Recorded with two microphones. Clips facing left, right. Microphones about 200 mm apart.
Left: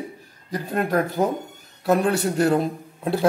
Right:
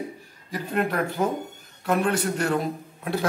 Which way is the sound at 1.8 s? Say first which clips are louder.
Left 4 dB; 35° left (ahead or behind).